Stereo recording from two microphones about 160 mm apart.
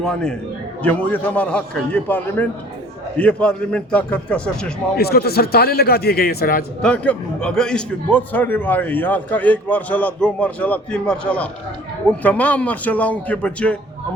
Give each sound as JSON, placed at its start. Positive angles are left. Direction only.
{"t": 0.0, "sound": "a man's voice", "side_deg": 5}
{"t": 4.9, "sound": "a man's voice", "side_deg": 75}
{"t": 6.8, "sound": "a man's voice", "side_deg": 10}